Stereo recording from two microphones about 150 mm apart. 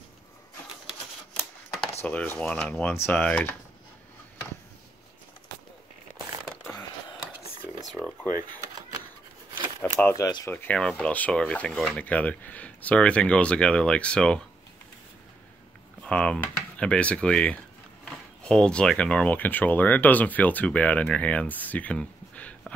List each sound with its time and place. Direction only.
2.0 s speech: 10° left (ahead or behind)
9.9 s speech: 20° left (ahead or behind)
10.5 s speech: 10° left (ahead or behind)
16.0 s speech: 5° left (ahead or behind)